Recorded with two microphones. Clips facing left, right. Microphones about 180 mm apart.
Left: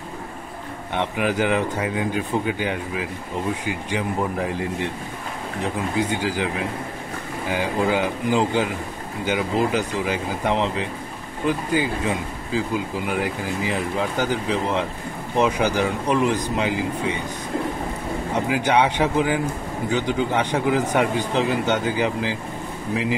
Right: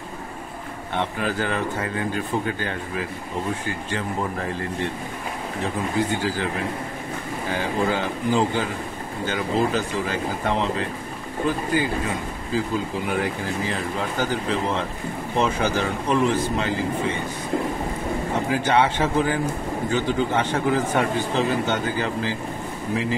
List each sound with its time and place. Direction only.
0.9 s a man's voice: 15° left (ahead or behind)
7.9 s a man's voice: 15° left (ahead or behind)
18.3 s a man's voice: 15° left (ahead or behind)